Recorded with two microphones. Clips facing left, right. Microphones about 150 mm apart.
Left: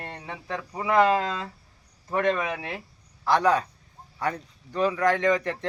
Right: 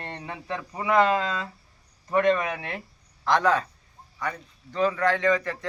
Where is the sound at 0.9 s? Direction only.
10° left (ahead or behind).